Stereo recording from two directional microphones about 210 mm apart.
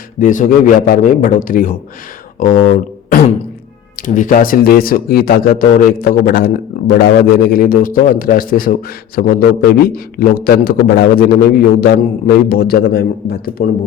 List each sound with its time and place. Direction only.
0.2 s a man's voice: 40° left (ahead or behind)
2.4 s a sound: 35° left (ahead or behind)
3.9 s a man's voice: 40° left (ahead or behind)